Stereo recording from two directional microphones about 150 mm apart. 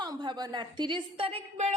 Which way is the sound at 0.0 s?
30° right (ahead or behind).